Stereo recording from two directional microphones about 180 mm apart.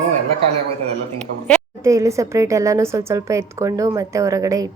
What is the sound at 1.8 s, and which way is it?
A woman's voice, 20° right (ahead or behind).